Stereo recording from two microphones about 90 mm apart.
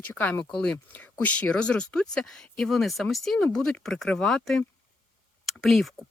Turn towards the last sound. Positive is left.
turn(degrees=0)  # may be behind; listen again after turning